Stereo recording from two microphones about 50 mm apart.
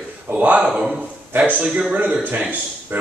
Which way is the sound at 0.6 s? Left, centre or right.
Centre.